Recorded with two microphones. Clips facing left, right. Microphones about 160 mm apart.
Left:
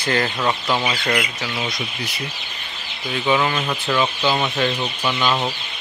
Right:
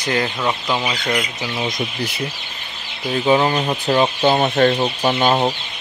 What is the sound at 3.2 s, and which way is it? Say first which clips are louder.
Speech: right 4 dB; 30° right (ahead or behind).